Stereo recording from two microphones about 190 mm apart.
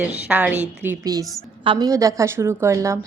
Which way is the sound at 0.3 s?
5° right (ahead or behind).